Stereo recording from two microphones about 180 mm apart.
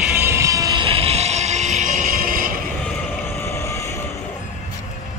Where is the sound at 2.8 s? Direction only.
15° left (ahead or behind).